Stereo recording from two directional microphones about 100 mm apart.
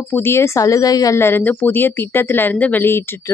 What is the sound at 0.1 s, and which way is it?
Speech, 25° left (ahead or behind).